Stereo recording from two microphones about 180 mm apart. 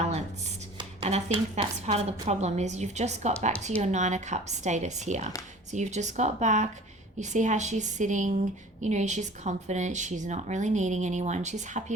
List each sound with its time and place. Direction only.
0.8 s a woman's voice: 30° right (ahead or behind)